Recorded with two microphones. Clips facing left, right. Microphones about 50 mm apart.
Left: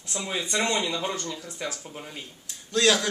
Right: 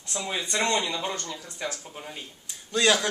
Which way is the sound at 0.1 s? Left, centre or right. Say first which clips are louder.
Left 1 dB; centre.